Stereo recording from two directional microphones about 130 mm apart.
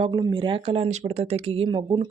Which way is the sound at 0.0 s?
40° right (ahead or behind).